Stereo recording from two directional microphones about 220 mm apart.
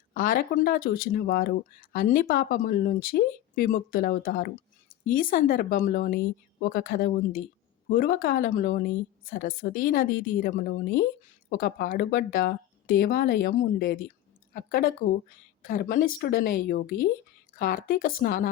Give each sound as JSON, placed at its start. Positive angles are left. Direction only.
{"t": 0.1, "sound": "a woman's voice", "side_deg": 40}